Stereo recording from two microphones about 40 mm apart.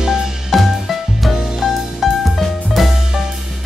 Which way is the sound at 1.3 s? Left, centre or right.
Centre.